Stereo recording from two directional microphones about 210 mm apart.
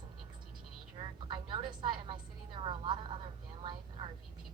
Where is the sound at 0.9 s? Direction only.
20° right (ahead or behind).